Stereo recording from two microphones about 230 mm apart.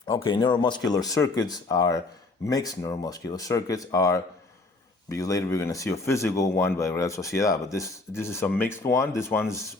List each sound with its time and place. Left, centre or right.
0.1 s speech: centre